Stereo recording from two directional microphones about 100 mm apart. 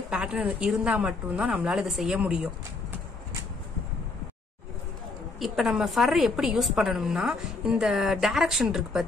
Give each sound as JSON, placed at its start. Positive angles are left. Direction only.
{"t": 0.1, "sound": "a woman's voice", "side_deg": -10}
{"t": 5.4, "sound": "a woman's voice", "side_deg": 0}